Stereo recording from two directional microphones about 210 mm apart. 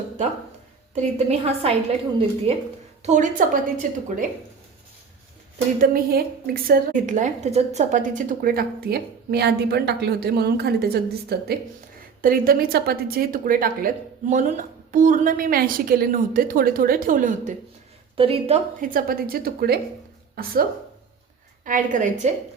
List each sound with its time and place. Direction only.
0.9 s a woman's voice: 30° right (ahead or behind)
5.8 s a woman's voice: 45° right (ahead or behind)
18.2 s a woman's voice: 30° right (ahead or behind)
18.9 s a woman's voice: 45° right (ahead or behind)